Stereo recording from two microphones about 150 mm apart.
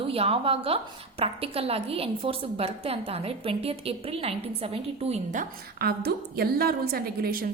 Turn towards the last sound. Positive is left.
turn(degrees=-80)